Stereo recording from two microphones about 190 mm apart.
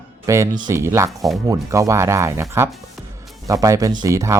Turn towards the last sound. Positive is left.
turn(degrees=-15)  # may be behind; listen again after turning